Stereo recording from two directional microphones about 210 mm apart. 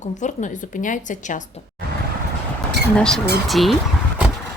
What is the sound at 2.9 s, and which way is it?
Speech, 5° left (ahead or behind).